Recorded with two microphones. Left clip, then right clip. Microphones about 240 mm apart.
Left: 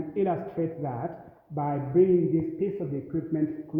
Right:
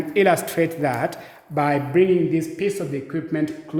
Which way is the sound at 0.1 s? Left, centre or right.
Right.